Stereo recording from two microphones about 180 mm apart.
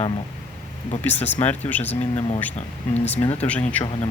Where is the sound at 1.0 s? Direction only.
10° left (ahead or behind).